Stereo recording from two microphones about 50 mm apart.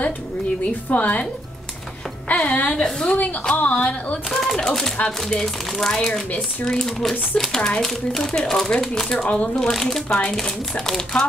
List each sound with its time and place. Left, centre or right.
0.8 s a woman's voice: left
2.3 s a woman's voice: left
2.8 s speech: centre
3.5 s a woman's voice: left
4.3 s a woman's voice: centre